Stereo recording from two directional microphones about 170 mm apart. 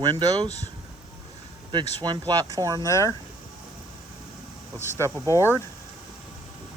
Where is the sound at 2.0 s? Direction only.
25° right (ahead or behind).